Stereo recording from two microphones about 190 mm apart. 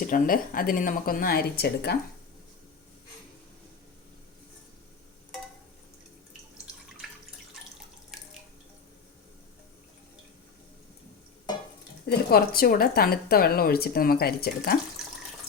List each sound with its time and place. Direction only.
0.1 s a woman's voice: 45° left (ahead or behind)
12.0 s a woman's voice: 55° left (ahead or behind)